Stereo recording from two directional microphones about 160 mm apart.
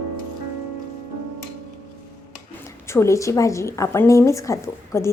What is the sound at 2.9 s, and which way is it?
A woman's voice, 15° left (ahead or behind).